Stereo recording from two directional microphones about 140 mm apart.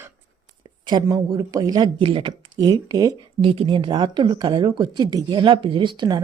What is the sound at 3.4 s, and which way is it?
Speech, 40° right (ahead or behind).